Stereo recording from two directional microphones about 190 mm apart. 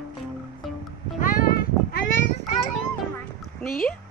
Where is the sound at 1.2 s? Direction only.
45° left (ahead or behind).